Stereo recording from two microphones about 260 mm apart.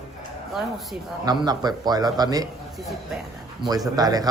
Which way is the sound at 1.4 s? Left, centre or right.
Centre.